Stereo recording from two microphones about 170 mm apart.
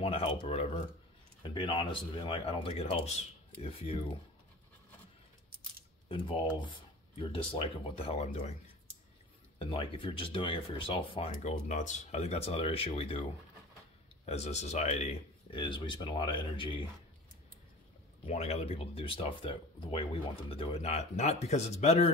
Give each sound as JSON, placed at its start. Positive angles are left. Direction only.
{"t": 0.0, "sound": "speech", "side_deg": 35}
{"t": 6.0, "sound": "speech", "side_deg": 30}
{"t": 9.6, "sound": "speech", "side_deg": 35}
{"t": 14.2, "sound": "speech", "side_deg": 40}
{"t": 18.2, "sound": "speech", "side_deg": 40}